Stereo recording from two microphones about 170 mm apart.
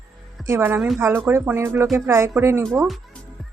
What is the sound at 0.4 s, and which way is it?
Speech, 15° right (ahead or behind).